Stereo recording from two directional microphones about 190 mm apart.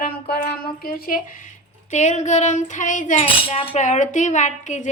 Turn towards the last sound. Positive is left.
turn(degrees=40)  # may be behind; listen again after turning